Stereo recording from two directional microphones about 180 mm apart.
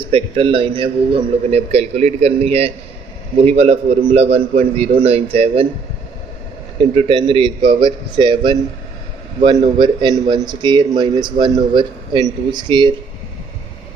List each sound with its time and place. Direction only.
0.0 s a man's voice: 30° right (ahead or behind)
6.9 s a man's voice: 30° right (ahead or behind)
9.4 s a man's voice: 25° right (ahead or behind)